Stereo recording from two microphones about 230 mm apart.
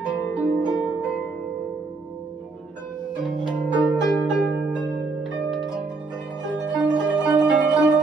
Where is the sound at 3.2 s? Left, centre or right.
Centre.